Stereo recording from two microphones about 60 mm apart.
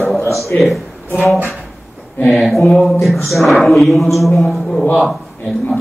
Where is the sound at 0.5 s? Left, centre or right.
Left.